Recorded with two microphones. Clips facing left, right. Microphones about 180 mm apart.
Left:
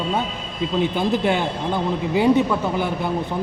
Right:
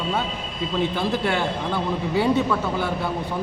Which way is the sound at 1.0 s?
20° left (ahead or behind).